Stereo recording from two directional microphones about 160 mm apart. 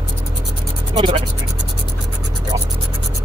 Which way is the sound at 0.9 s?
30° right (ahead or behind).